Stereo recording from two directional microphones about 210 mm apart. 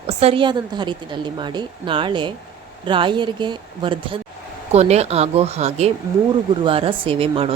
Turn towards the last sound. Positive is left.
turn(degrees=-25)  # may be behind; listen again after turning